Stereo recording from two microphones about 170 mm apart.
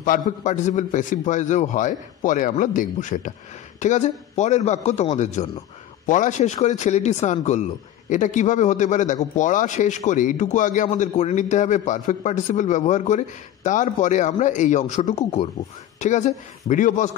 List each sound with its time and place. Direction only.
0.0 s a man's voice: 50° left (ahead or behind)